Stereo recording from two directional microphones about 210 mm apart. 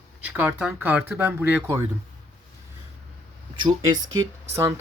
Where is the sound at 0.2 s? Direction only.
10° right (ahead or behind).